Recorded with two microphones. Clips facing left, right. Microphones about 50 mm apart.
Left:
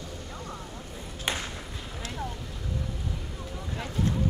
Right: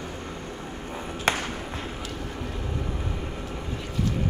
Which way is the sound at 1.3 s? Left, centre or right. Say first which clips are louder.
Right 6 dB; right.